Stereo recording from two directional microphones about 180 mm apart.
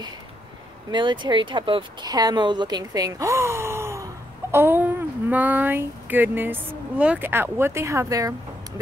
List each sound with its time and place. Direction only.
0.9 s speech: 25° right (ahead or behind)